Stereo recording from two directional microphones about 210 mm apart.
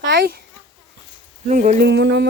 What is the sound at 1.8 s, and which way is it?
Speech, 55° right (ahead or behind).